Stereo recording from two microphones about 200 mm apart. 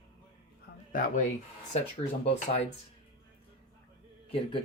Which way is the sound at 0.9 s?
45° left (ahead or behind).